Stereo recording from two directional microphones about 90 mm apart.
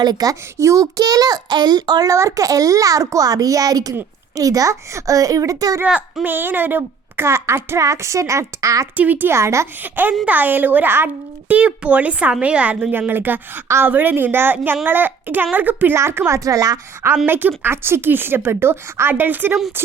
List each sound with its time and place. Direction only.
0.0 s speech: 45° right (ahead or behind)
0.5 s a child's voice: 35° right (ahead or behind)
6.2 s speech: 20° right (ahead or behind); by 8.9 s 35° right (ahead or behind)
9.0 s speech: 20° right (ahead or behind)
9.8 s speech: 20° right (ahead or behind)
12.9 s a child's voice: 20° right (ahead or behind); by 16.8 s 40° right (ahead or behind)
17.2 s speech: 25° right (ahead or behind)